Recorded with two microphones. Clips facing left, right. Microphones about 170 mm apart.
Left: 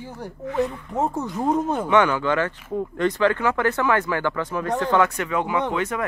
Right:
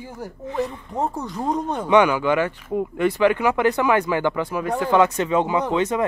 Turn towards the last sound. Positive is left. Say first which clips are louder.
# right 3 dB
turn(degrees=-20)  # may be behind; listen again after turning